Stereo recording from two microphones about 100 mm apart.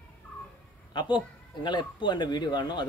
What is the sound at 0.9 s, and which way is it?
Speech, 50° left (ahead or behind).